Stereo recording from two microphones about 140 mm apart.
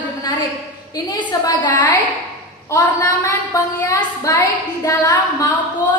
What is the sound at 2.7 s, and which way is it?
A woman's voice, 20° left (ahead or behind).